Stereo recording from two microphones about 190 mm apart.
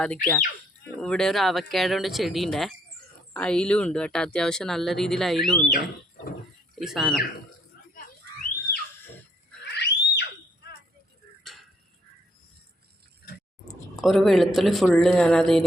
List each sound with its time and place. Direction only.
0.0 s speech: 5° left (ahead or behind)
6.7 s speech: centre (ahead or behind)
9.7 s a sound: 60° left (ahead or behind)
11.4 s tick-tock: centre (ahead or behind)
14.0 s speech: centre (ahead or behind)